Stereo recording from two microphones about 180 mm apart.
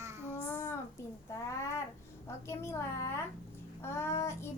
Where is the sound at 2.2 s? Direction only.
15° left (ahead or behind).